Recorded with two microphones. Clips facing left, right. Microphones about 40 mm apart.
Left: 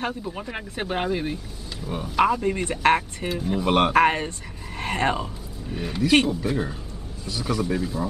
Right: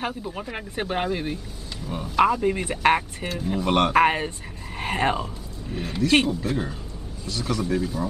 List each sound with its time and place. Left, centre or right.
0.0 s speech: centre
1.9 s speech: centre
3.9 s speech: centre